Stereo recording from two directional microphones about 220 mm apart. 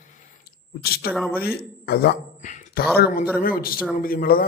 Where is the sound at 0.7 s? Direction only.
45° left (ahead or behind).